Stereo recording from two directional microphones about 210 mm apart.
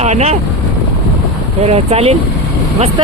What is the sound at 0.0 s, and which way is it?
Speech, 30° right (ahead or behind).